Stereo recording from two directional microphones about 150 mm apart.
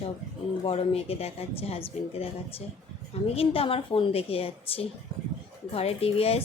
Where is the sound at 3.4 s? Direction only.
40° left (ahead or behind).